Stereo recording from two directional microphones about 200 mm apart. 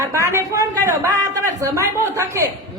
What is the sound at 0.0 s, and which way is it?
A man's voice, 15° right (ahead or behind).